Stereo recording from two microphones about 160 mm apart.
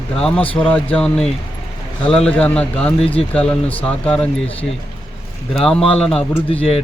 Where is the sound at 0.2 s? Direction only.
5° left (ahead or behind).